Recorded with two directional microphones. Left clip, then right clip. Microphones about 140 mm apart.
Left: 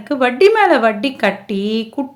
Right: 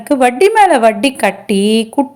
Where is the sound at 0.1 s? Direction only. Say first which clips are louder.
Right 2 dB; 25° right (ahead or behind).